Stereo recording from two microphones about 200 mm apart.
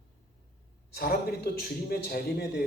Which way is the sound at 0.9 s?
50° left (ahead or behind).